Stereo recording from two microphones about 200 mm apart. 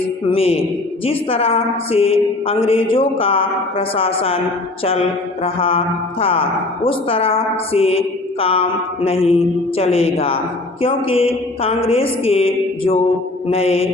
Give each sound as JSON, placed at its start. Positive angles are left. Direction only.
{"t": 0.3, "sound": "mantra", "side_deg": 30}